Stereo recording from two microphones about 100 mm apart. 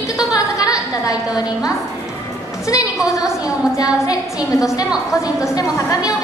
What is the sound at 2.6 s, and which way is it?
Speech, 35° left (ahead or behind).